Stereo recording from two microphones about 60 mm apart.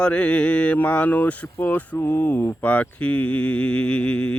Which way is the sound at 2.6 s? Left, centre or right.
Left.